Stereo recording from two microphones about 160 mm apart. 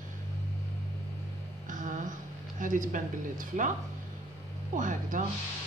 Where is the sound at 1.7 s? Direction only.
50° right (ahead or behind).